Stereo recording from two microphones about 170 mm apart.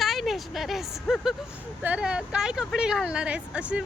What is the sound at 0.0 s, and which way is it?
Speech, centre (ahead or behind).